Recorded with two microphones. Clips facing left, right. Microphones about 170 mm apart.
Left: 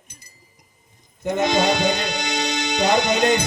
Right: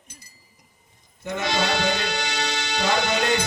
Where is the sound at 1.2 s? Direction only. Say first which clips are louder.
Left 6 dB; 15° left (ahead or behind).